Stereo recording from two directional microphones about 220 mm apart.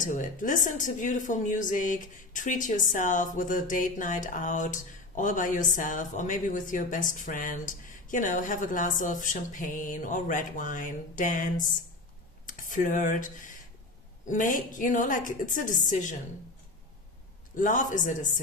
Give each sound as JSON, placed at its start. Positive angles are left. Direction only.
{"t": 0.0, "sound": "speech", "side_deg": 35}
{"t": 17.6, "sound": "speech", "side_deg": 35}